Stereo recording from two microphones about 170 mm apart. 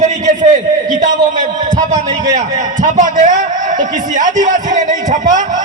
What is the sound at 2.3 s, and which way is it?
A man's voice, 50° right (ahead or behind).